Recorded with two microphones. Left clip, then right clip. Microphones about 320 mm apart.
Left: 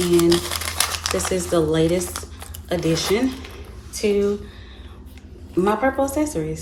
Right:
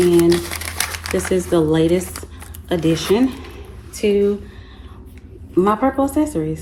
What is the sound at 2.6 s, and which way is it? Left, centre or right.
Speech, centre.